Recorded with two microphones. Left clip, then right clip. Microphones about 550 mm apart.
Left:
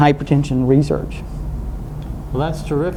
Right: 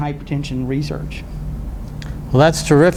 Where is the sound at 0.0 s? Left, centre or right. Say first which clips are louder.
Left 11 dB; left.